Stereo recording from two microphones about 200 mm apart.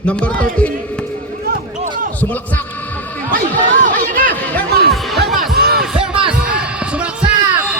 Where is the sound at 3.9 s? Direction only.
45° right (ahead or behind).